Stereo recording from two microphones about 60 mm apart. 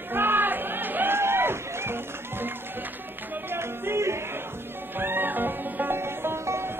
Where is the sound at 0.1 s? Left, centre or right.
Right.